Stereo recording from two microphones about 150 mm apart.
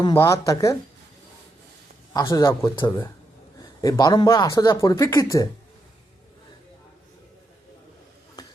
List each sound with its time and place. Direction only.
0.2 s speech: 20° left (ahead or behind)
2.1 s speech: 20° left (ahead or behind)